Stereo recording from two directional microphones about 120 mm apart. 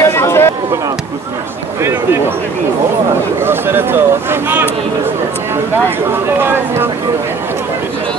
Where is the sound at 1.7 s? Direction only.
20° right (ahead or behind).